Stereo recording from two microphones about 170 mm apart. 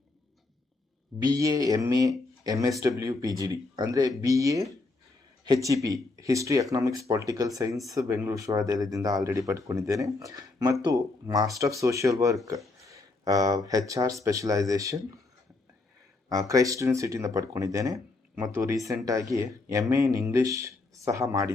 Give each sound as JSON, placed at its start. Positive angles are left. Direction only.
{"t": 1.2, "sound": "speech", "side_deg": -20}
{"t": 16.3, "sound": "speech", "side_deg": -20}